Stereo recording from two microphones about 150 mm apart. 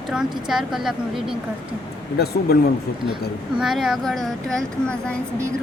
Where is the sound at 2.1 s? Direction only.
90° left.